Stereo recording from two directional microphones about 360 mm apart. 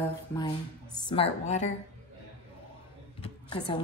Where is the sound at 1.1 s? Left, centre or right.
Centre.